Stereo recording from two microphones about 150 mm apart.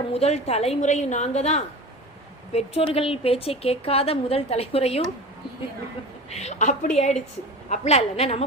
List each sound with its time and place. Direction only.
0.1 s a woman's voice: 45° left (ahead or behind)
6.3 s a woman's voice: 50° left (ahead or behind)